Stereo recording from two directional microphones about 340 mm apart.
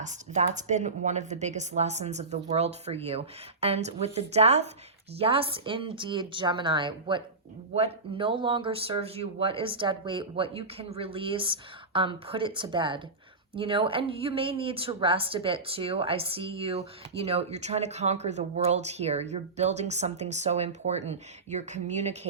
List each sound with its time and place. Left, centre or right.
0.0 s a woman's voice: right